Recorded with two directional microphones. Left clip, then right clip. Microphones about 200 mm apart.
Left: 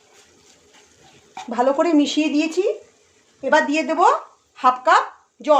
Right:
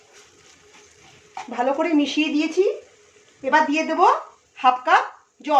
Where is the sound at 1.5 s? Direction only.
45° left (ahead or behind).